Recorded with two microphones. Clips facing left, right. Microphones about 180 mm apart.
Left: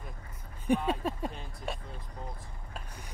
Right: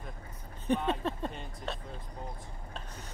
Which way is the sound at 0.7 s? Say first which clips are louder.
Even; 10° left (ahead or behind).